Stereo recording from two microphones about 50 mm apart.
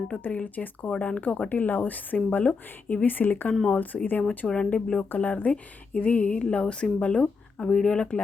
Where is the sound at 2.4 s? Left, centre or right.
Left.